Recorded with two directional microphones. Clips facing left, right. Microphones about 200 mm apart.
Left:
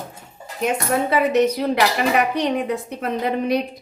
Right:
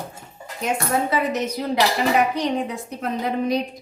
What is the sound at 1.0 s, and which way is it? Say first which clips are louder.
A woman's voice: left 6 dB; 60° left (ahead or behind).